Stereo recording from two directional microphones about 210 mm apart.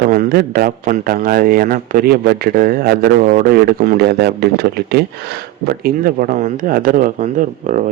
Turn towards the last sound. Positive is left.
turn(degrees=-40)  # may be behind; listen again after turning